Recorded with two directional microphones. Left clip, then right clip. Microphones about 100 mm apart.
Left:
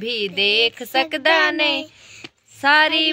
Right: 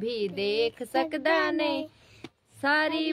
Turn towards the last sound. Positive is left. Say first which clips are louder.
# left 10 dB
turn(degrees=5)  # may be behind; listen again after turning